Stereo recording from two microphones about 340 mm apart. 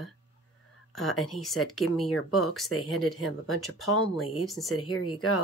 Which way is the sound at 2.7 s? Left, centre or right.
Left.